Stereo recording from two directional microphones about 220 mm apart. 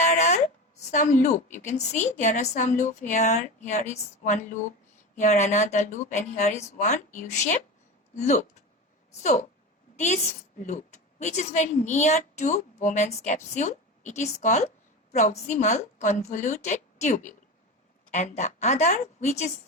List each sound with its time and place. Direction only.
0.0 s a woman's voice: 30° left (ahead or behind)
10.6 s a woman's voice: 35° left (ahead or behind)